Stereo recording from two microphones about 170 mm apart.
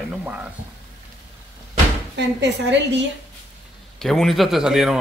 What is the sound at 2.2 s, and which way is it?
Speech, 90° right.